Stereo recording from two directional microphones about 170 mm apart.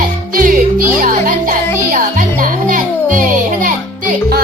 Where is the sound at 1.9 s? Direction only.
50° right (ahead or behind).